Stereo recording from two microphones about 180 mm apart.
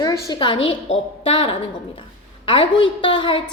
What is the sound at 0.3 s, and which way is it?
A woman's voice, 25° left (ahead or behind).